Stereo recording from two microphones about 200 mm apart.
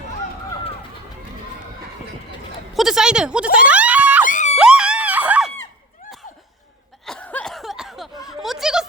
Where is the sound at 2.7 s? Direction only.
Centre (ahead or behind).